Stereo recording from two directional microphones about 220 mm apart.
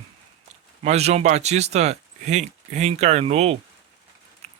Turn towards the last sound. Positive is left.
turn(degrees=-30)  # may be behind; listen again after turning